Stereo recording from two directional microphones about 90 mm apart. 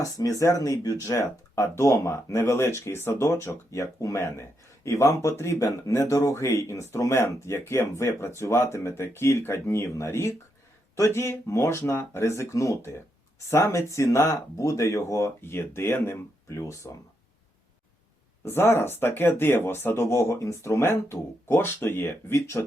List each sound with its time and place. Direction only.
0.0 s speech: 40° left (ahead or behind)
18.4 s speech: 25° left (ahead or behind)